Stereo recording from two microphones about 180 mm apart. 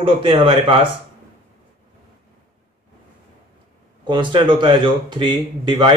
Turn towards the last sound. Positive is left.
turn(degrees=-25)  # may be behind; listen again after turning